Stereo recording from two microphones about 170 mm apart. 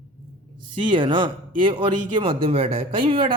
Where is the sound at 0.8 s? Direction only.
30° right (ahead or behind).